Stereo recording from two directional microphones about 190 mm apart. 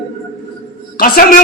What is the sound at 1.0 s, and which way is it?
Speech, 50° left (ahead or behind).